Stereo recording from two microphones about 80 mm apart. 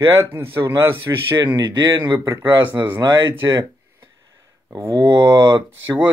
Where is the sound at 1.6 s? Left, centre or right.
Right.